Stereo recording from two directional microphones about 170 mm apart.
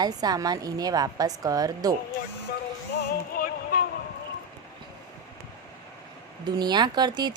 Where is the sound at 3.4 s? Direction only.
60° left (ahead or behind).